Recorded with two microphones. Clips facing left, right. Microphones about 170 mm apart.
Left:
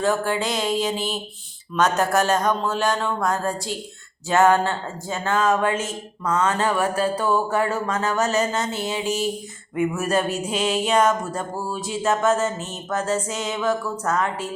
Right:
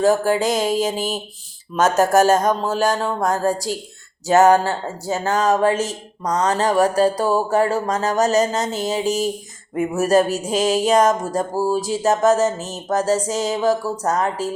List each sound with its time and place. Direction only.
0.0 s speech: 40° right (ahead or behind)